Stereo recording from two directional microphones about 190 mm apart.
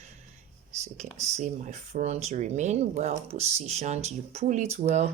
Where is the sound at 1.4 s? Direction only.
40° right (ahead or behind).